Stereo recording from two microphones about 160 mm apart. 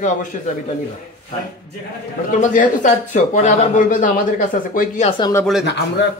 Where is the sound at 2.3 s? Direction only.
50° left (ahead or behind).